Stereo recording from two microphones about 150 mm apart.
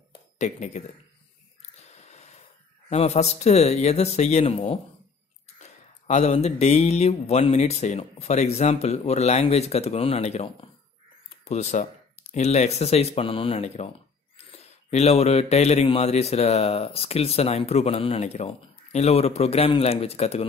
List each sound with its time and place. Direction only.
0.4 s speech: 50° left (ahead or behind)
1.6 s snort: 45° left (ahead or behind)
2.9 s speech: 45° left (ahead or behind)